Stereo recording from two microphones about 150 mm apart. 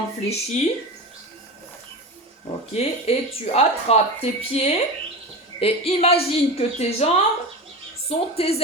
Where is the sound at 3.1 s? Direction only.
45° left (ahead or behind).